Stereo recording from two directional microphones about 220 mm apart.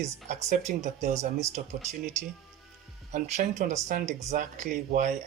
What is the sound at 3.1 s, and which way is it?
Speech, 35° right (ahead or behind).